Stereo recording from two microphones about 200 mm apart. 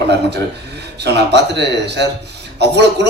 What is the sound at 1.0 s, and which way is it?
A man's voice, 55° right (ahead or behind).